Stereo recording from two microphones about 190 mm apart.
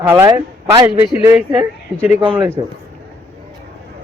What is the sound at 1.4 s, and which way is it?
Speech, 10° right (ahead or behind).